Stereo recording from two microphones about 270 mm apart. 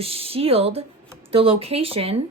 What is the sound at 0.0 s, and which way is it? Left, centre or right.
Speech, right.